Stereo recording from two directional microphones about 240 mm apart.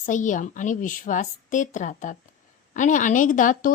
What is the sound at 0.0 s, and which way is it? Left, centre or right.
Speech, left.